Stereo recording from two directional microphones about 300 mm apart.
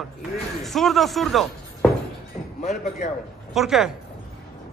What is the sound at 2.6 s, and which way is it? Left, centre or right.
Speech, left.